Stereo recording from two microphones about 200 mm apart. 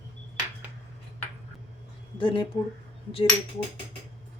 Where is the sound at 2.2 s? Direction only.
25° left (ahead or behind).